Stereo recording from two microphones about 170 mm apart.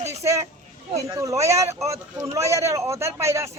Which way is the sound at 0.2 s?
15° right (ahead or behind).